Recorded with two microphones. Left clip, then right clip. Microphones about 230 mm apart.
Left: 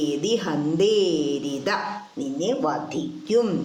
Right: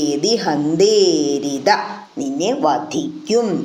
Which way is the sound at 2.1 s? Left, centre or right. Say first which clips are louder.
Right 6 dB; right.